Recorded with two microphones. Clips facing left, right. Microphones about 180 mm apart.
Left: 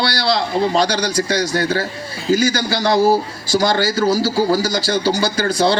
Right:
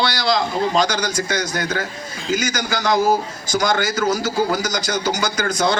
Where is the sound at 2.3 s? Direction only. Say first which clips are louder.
Left 6 dB; 35° left (ahead or behind).